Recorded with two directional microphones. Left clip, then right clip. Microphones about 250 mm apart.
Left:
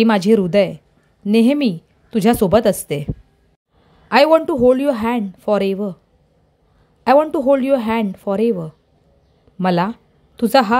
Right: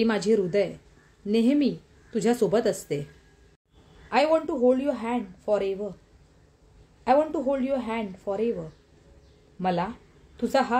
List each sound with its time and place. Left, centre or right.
0.0 s a woman's voice: left
4.1 s a woman's voice: left
7.1 s a woman's voice: left
9.6 s a woman's voice: left